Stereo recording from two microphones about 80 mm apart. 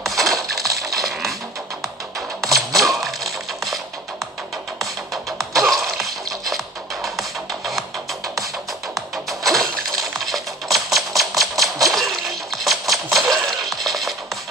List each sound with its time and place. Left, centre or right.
0.0 s a sound: centre
0.6 s music: right
0.9 s music: centre
3.0 s crushing: centre
5.1 s music: centre
8.9 s coin: centre